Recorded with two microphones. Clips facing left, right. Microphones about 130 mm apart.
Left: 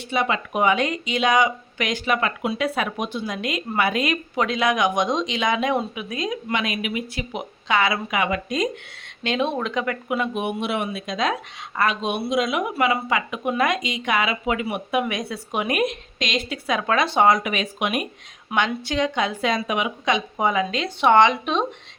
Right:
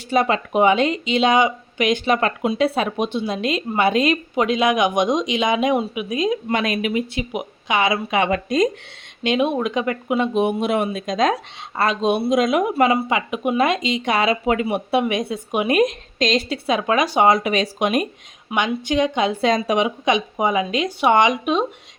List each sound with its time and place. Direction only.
0.1 s speech: 40° right (ahead or behind)
0.5 s speech: 25° right (ahead or behind)
2.0 s speech: 35° right (ahead or behind)
4.4 s speech: 20° right (ahead or behind)
6.5 s speech: 40° right (ahead or behind)
7.2 s speech: 20° right (ahead or behind); by 8.7 s 40° right (ahead or behind)
9.2 s speech: 15° right (ahead or behind)
10.4 s speech: 40° right (ahead or behind)
12.7 s speech: 35° right (ahead or behind)
13.1 s speech: 20° right (ahead or behind)
15.8 s speech: 40° right (ahead or behind)
16.6 s speech: 20° right (ahead or behind); by 18.0 s 35° right (ahead or behind)
18.5 s speech: 15° right (ahead or behind); by 19.9 s 35° right (ahead or behind)
20.1 s speech: 20° right (ahead or behind)